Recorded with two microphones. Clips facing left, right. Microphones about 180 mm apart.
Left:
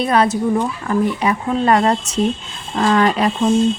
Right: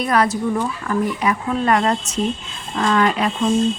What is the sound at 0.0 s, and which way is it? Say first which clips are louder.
Speech: left 3 dB; 25° left (ahead or behind).